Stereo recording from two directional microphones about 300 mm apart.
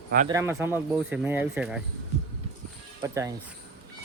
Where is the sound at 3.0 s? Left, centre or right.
Centre.